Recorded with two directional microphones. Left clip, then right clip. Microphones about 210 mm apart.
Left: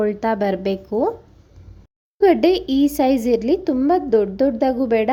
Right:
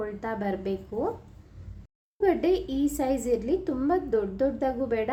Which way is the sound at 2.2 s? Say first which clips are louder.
Left 9 dB; 40° left (ahead or behind).